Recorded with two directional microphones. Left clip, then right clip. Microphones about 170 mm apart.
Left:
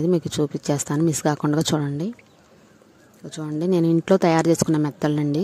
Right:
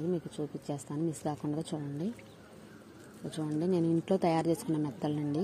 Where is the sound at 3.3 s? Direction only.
45° left (ahead or behind).